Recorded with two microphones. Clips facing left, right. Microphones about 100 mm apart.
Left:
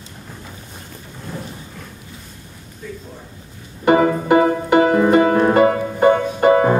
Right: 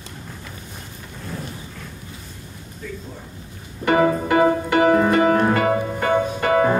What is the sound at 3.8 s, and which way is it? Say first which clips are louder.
Music: left 3 dB; 25° left (ahead or behind).